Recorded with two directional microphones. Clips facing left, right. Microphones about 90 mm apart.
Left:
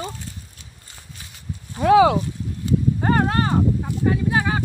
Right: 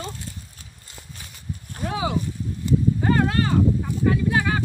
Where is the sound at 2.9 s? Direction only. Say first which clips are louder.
Left 1 dB; 40° left (ahead or behind).